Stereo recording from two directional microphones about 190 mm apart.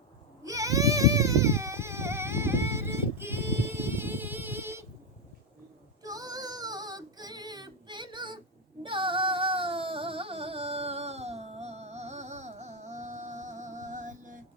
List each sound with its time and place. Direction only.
0.4 s baby cry: 15° right (ahead or behind)
6.0 s female singing: 20° right (ahead or behind)
8.8 s music: 25° right (ahead or behind); by 14.4 s 45° right (ahead or behind)